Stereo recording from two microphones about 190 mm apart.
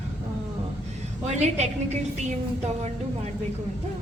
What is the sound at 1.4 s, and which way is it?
Speech, 35° right (ahead or behind).